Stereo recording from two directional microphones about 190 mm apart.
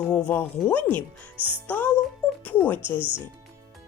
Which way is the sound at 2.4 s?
10° left (ahead or behind).